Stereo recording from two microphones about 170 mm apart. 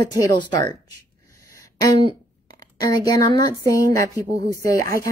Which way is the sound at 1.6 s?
20° left (ahead or behind).